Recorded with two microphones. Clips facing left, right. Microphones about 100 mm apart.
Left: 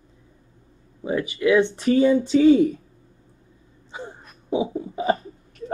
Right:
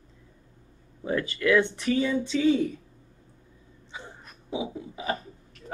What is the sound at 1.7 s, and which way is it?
Speech, 30° left (ahead or behind).